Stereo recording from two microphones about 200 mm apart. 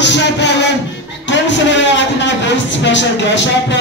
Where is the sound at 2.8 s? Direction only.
65° left (ahead or behind).